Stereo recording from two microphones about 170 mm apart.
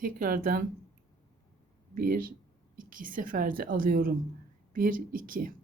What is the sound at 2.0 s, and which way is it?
A woman's voice, 55° right (ahead or behind).